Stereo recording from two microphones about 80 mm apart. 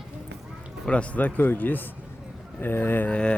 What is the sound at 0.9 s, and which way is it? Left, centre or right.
Speech, centre.